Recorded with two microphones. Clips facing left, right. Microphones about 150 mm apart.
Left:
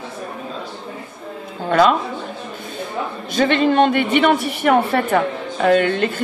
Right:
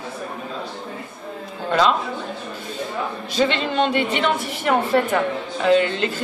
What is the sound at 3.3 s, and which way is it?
A woman's voice, 50° left (ahead or behind).